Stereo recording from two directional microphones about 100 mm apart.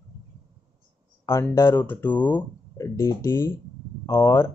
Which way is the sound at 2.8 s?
30° left (ahead or behind).